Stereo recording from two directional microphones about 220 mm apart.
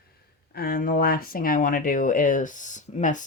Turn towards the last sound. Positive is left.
turn(degrees=35)  # may be behind; listen again after turning